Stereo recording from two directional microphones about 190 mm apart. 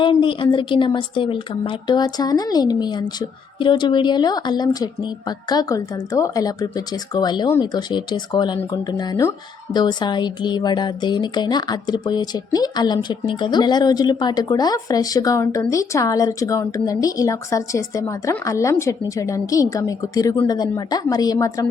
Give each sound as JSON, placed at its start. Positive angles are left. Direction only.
{"t": 0.0, "sound": "speech", "side_deg": 25}